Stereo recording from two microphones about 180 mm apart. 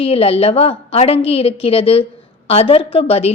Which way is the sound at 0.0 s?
35° left (ahead or behind).